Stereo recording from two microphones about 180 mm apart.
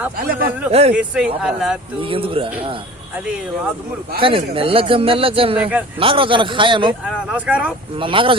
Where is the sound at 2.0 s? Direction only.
30° right (ahead or behind).